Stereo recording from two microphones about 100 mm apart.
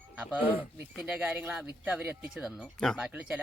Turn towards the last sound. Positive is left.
turn(degrees=-10)  # may be behind; listen again after turning